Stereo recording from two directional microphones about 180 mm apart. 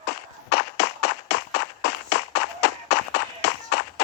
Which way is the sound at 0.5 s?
65° left (ahead or behind).